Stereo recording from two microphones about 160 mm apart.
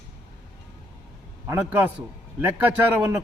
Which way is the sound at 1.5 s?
10° right (ahead or behind).